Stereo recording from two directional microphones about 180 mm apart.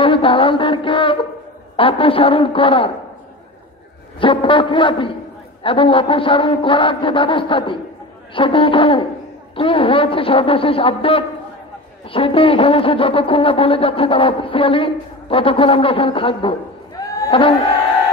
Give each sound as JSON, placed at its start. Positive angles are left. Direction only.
{"t": 0.0, "sound": "mantra", "side_deg": 30}
{"t": 1.8, "sound": "a man's voice", "side_deg": 30}
{"t": 4.2, "sound": "a man's voice", "side_deg": 30}